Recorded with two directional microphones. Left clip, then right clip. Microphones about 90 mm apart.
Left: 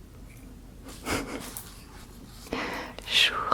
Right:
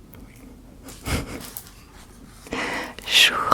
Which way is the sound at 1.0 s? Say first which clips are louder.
Right 1 dB; 10° right (ahead or behind).